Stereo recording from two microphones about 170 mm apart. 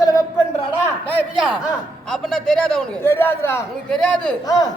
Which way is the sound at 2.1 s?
5° left (ahead or behind).